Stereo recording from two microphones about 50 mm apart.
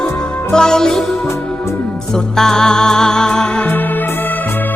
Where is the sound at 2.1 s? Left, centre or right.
Centre.